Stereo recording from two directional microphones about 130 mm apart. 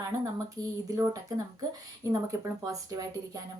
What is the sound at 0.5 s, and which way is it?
Speech, 25° right (ahead or behind).